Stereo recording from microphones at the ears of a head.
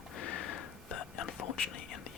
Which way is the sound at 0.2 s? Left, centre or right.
Left.